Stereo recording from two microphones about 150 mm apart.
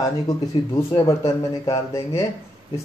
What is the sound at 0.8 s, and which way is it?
Speech, 20° left (ahead or behind).